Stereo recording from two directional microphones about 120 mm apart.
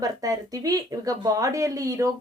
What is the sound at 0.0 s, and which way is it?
Speech, 30° right (ahead or behind).